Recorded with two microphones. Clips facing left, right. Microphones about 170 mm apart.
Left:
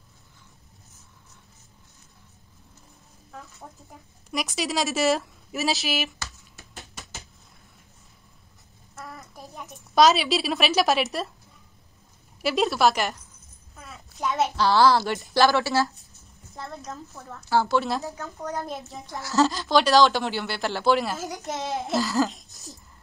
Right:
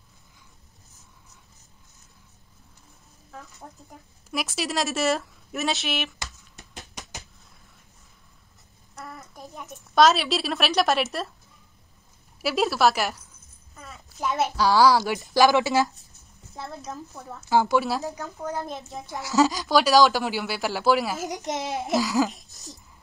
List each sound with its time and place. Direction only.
3.6 s a woman's voice: 5° left (ahead or behind)
6.1 s computer keyboard: 15° right (ahead or behind)
8.9 s a sound: centre (ahead or behind)
12.4 s a woman's voice: centre (ahead or behind)
13.7 s a sound: centre (ahead or behind)
15.2 s speech: 15° right (ahead or behind)
18.4 s a woman's voice: centre (ahead or behind)
21.2 s a child's voice: 20° right (ahead or behind)
22.2 s a sound: centre (ahead or behind)